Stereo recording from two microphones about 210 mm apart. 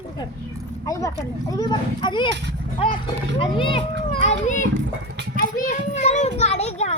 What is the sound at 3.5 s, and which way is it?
Children playing, 25° left (ahead or behind).